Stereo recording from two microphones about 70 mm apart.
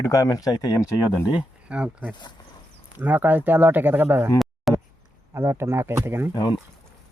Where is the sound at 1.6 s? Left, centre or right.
Centre.